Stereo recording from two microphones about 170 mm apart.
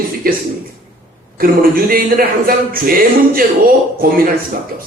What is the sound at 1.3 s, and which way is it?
Speech, 60° right (ahead or behind).